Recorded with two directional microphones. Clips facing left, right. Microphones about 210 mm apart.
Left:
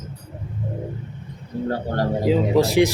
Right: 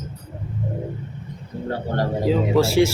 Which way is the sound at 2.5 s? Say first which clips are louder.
Right 1 dB; 15° left (ahead or behind).